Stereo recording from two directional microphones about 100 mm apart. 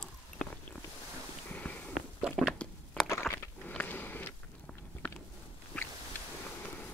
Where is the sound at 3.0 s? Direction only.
25° left (ahead or behind).